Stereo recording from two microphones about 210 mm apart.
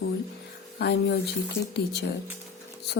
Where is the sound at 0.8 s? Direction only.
50° left (ahead or behind).